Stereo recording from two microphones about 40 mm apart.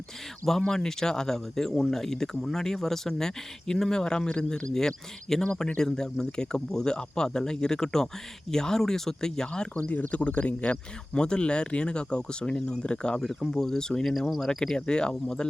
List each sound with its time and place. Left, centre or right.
0.6 s speech: centre
9.8 s speech: left
13.5 s speech: centre